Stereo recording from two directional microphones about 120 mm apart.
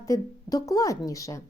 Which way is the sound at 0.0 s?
30° left (ahead or behind).